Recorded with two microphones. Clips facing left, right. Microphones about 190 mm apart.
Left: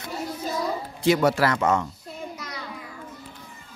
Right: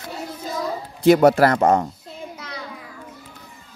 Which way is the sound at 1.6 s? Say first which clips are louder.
Right 5 dB; 35° right (ahead or behind).